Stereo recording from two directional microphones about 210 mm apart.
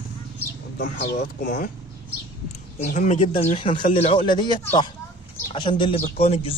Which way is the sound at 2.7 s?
35° left (ahead or behind).